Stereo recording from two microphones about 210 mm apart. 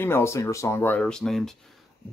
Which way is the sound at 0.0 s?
10° left (ahead or behind).